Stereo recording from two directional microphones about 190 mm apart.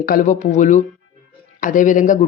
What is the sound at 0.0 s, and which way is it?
Speech, 45° left (ahead or behind).